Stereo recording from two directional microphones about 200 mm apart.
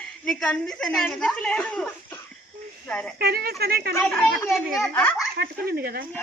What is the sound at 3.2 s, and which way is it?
Speech, 50° right (ahead or behind).